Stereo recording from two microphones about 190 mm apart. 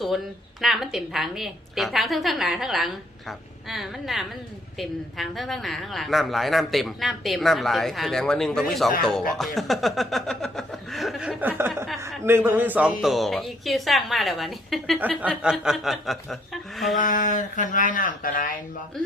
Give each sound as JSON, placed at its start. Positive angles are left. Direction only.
{"t": 0.6, "sound": "a woman's voice", "side_deg": 0}
{"t": 17.0, "sound": "speech", "side_deg": 45}